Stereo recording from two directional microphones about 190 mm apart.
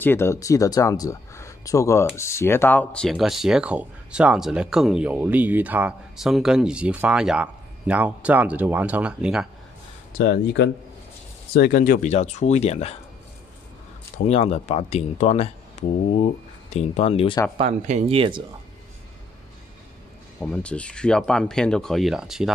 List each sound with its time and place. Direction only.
0.0 s speech: 10° left (ahead or behind); by 9.5 s 5° right (ahead or behind)
10.1 s speech: 65° left (ahead or behind)
11.5 s speech: 55° left (ahead or behind); by 12.9 s 35° left (ahead or behind)
14.1 s speech: 35° left (ahead or behind)
16.7 s speech: 35° left (ahead or behind)
17.6 s speech: 35° right (ahead or behind)
20.3 s speech: 5° left (ahead or behind)